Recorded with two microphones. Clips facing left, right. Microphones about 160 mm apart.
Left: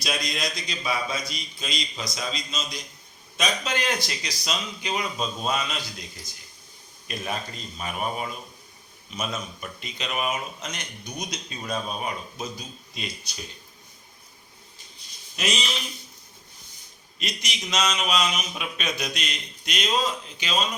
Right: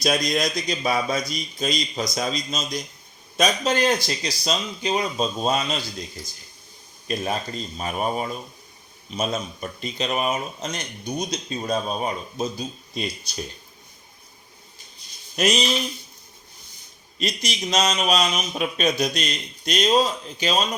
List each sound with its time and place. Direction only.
0.0 s speech: 45° right (ahead or behind)
15.4 s speech: 40° right (ahead or behind)
17.2 s speech: 35° right (ahead or behind)